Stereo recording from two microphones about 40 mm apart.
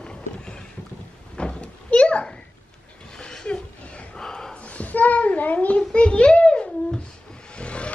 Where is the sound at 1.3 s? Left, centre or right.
Left.